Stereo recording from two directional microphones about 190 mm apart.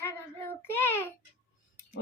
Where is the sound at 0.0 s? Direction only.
10° left (ahead or behind).